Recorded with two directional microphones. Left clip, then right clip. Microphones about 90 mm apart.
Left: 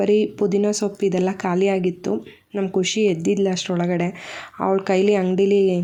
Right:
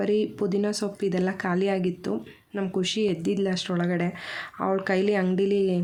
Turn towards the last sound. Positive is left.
turn(degrees=40)  # may be behind; listen again after turning